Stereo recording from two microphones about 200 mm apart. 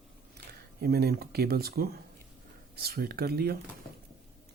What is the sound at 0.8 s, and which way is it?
Speech, 50° right (ahead or behind).